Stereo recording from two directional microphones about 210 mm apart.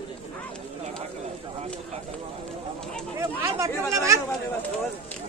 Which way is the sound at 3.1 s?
15° right (ahead or behind).